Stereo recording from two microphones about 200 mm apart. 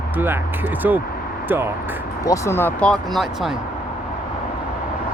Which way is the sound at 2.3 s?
10° left (ahead or behind).